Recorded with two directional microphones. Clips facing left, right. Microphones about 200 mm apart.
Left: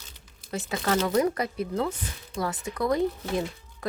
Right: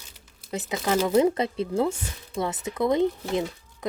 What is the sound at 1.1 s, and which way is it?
Speech, 25° right (ahead or behind).